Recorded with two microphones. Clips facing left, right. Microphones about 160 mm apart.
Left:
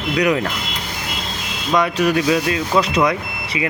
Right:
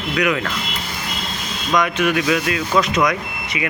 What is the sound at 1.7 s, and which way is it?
Speech, 35° left (ahead or behind).